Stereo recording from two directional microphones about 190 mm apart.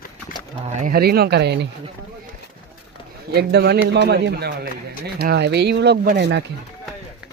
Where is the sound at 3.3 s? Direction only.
60° right (ahead or behind).